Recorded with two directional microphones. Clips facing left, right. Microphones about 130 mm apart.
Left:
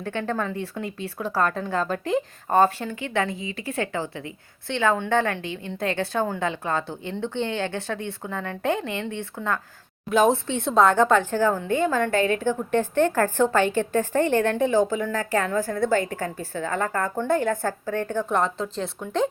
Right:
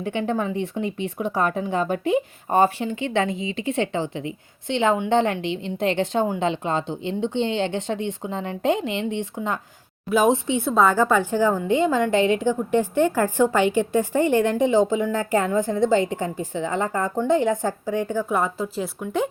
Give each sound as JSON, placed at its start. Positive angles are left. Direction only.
{"t": 0.0, "sound": "a woman's voice", "side_deg": -15}
{"t": 10.6, "sound": "a woman's voice", "side_deg": -5}